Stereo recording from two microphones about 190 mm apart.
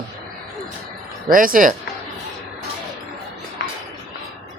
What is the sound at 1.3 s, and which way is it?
Speech, 45° right (ahead or behind).